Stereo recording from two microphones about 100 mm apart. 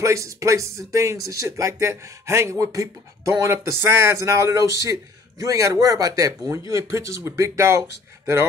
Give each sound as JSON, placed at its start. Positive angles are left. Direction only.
{"t": 0.0, "sound": "speech", "side_deg": -30}